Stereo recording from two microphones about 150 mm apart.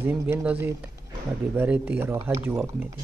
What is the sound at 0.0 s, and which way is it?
Speech, 10° right (ahead or behind).